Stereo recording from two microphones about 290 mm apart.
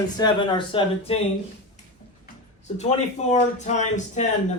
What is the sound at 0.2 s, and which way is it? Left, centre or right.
Speech, centre.